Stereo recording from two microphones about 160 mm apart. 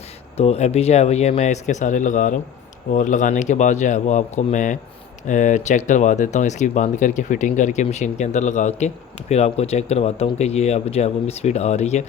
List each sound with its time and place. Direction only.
0.3 s speech: 40° left (ahead or behind)